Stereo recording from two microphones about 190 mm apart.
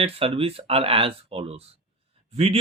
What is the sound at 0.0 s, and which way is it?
Speech, 30° right (ahead or behind).